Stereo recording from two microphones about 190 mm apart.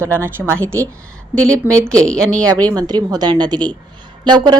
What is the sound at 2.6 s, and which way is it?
A woman's voice, 20° right (ahead or behind).